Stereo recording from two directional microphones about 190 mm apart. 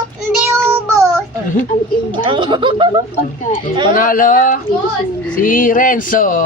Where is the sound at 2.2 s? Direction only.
25° right (ahead or behind).